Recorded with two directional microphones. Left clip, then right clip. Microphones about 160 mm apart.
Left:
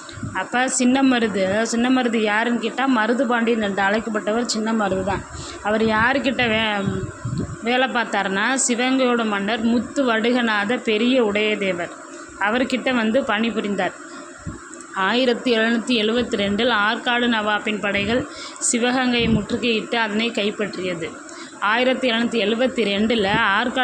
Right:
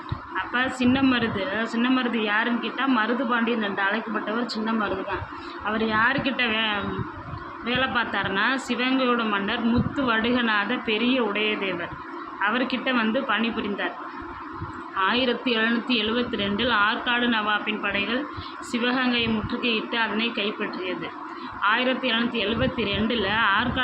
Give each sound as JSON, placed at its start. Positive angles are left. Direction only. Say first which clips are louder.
{"t": 0.3, "sound": "speech", "louder": "left 4 dB", "side_deg": 50}
{"t": 14.9, "sound": "speech", "louder": "left 4 dB", "side_deg": 45}